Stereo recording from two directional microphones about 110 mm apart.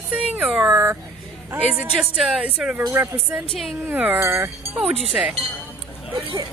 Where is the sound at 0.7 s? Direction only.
20° right (ahead or behind).